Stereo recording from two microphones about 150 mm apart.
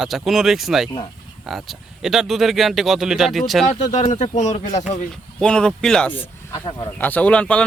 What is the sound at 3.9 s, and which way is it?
Speech, 55° left (ahead or behind).